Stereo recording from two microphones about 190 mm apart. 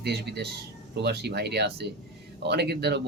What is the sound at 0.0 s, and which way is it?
Speech, 60° right (ahead or behind).